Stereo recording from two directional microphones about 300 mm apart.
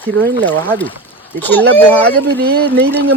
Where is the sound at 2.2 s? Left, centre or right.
Right.